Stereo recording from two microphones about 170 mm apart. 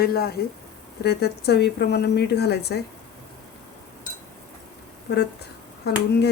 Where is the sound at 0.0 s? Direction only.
65° left (ahead or behind).